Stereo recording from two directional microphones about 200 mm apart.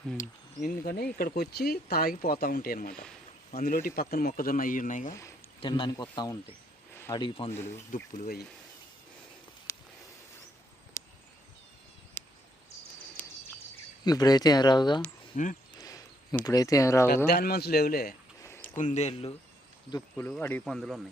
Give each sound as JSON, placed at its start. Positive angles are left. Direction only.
{"t": 0.2, "sound": "speech", "side_deg": 45}
{"t": 5.5, "sound": "speech", "side_deg": 25}
{"t": 8.1, "sound": "speech", "side_deg": 40}
{"t": 9.7, "sound": "a sound", "side_deg": 10}
{"t": 11.0, "sound": "a sound", "side_deg": 15}
{"t": 12.2, "sound": "a sound", "side_deg": 10}
{"t": 14.0, "sound": "speech", "side_deg": 20}
{"t": 15.3, "sound": "speech", "side_deg": 40}
{"t": 15.8, "sound": "a sound", "side_deg": 15}
{"t": 16.3, "sound": "speech", "side_deg": 5}
{"t": 17.2, "sound": "speech", "side_deg": 50}
{"t": 18.8, "sound": "speech", "side_deg": 35}
{"t": 20.1, "sound": "speech", "side_deg": 10}